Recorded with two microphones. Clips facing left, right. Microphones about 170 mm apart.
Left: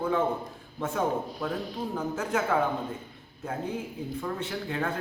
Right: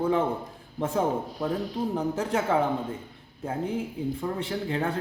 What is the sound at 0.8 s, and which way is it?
Speech, 30° right (ahead or behind).